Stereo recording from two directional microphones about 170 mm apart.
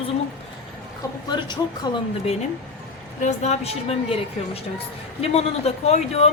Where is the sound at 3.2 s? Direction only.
40° left (ahead or behind).